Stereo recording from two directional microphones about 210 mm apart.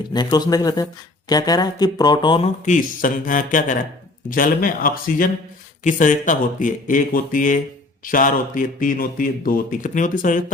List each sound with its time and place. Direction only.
0.1 s speech: 20° left (ahead or behind)
1.3 s a sound: 20° left (ahead or behind)
2.6 s a man's voice: 40° left (ahead or behind)